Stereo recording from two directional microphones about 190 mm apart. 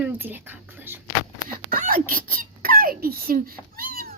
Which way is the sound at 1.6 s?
50° right (ahead or behind).